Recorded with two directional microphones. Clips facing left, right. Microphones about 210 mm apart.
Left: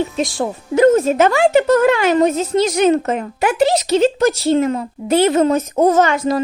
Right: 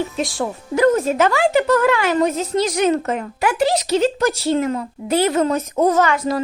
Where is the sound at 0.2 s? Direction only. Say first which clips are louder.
Left 3 dB; 25° left (ahead or behind).